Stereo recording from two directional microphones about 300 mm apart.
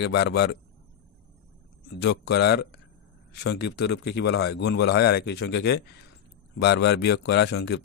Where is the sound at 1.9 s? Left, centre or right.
Left.